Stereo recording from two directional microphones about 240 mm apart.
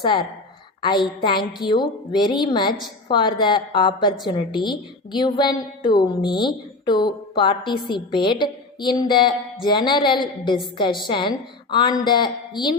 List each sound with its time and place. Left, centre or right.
0.8 s a woman's voice: centre